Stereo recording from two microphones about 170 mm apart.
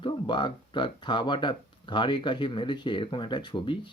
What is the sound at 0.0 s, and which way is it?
Speech, 30° left (ahead or behind).